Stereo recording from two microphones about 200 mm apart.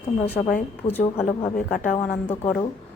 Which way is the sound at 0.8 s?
30° left (ahead or behind).